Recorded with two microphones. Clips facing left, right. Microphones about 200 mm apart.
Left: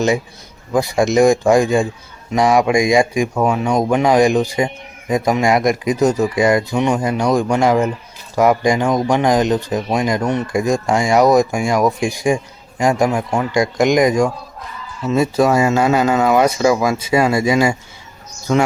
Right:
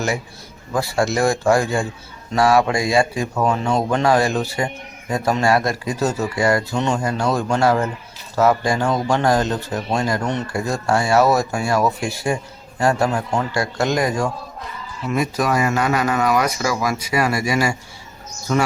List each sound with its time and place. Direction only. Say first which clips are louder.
0.7 s speech: left 5 dB; 15° left (ahead or behind)
15.0 s speech: left 6 dB; 25° left (ahead or behind)